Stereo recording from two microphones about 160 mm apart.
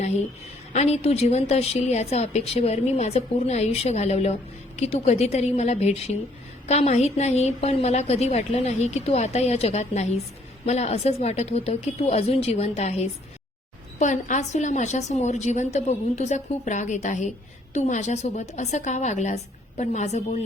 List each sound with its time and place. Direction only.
0.7 s a woman's voice: 45° left (ahead or behind)